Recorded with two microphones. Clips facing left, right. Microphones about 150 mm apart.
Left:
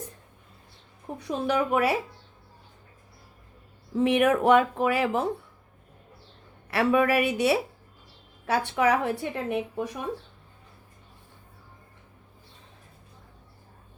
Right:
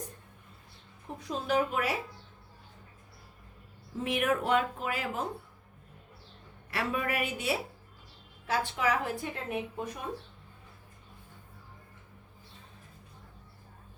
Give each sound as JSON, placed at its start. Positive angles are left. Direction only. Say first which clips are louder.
{"t": 1.0, "sound": "a woman's voice", "louder": "left 6 dB", "side_deg": 70}
{"t": 3.9, "sound": "speech", "louder": "left 8 dB", "side_deg": 85}
{"t": 6.7, "sound": "a woman's voice", "louder": "left 10 dB", "side_deg": 85}
{"t": 8.4, "sound": "a woman's voice", "louder": "left 6 dB", "side_deg": 65}